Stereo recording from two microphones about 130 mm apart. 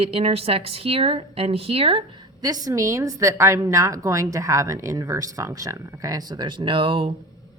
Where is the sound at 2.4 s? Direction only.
25° right (ahead or behind); by 7.1 s 45° right (ahead or behind).